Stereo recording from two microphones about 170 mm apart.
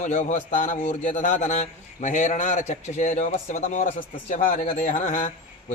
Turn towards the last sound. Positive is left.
turn(degrees=50)  # may be behind; listen again after turning